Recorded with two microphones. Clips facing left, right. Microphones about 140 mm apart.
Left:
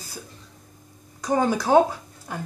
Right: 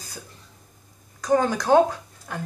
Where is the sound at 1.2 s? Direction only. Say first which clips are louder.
Right 1 dB; 10° left (ahead or behind).